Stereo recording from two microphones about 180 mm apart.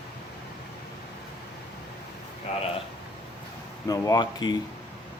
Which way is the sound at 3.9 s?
20° left (ahead or behind).